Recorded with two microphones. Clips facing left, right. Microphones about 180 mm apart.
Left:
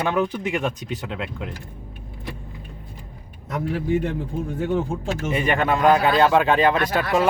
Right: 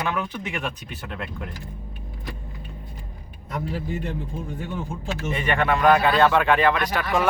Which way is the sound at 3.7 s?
60° left (ahead or behind).